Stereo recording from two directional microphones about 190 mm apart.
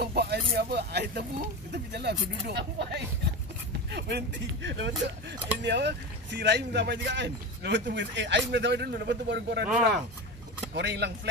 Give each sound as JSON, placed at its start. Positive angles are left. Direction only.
{"t": 0.0, "sound": "speech", "side_deg": -60}
{"t": 10.7, "sound": "speech", "side_deg": -65}